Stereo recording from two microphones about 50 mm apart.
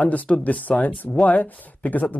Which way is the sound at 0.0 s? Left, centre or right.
Left.